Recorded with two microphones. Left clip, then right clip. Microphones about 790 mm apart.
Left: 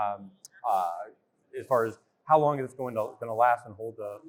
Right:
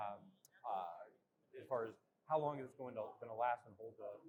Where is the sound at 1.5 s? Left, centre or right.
Left.